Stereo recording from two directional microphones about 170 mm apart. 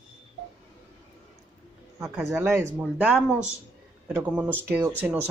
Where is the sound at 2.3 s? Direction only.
15° right (ahead or behind).